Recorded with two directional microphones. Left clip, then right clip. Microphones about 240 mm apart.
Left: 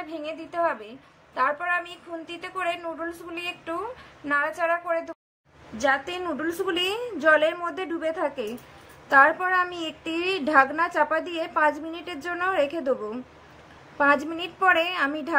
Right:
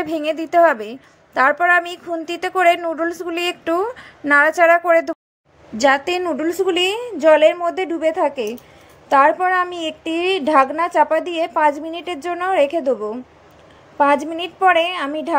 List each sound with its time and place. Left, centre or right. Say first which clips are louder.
0.0 s a woman's voice: right 12 dB; right; by 15.3 s centre